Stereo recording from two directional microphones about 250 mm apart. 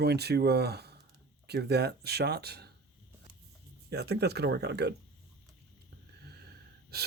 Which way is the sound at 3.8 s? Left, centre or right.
Right.